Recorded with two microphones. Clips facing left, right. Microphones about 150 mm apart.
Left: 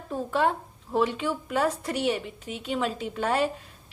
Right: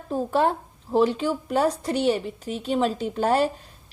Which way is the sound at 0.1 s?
35° right (ahead or behind).